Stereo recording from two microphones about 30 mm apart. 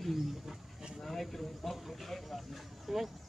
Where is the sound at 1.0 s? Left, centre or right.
Centre.